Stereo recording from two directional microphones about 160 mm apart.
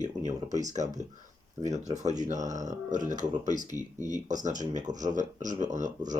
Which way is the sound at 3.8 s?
20° left (ahead or behind).